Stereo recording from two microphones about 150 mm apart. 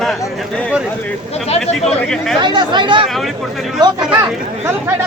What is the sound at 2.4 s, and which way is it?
Speech, 30° right (ahead or behind).